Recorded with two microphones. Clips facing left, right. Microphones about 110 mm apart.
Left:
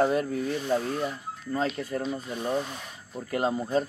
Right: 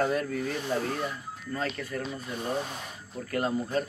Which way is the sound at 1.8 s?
25° left (ahead or behind).